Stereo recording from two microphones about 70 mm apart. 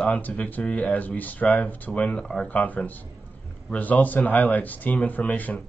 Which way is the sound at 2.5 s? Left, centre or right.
Left.